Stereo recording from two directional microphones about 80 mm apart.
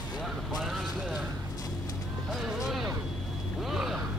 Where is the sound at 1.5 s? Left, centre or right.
Left.